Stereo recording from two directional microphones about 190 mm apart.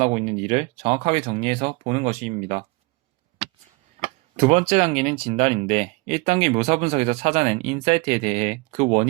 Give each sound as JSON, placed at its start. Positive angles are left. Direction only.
{"t": 0.0, "sound": "speech", "side_deg": -35}
{"t": 4.0, "sound": "a sound", "side_deg": -35}
{"t": 4.4, "sound": "speech", "side_deg": -35}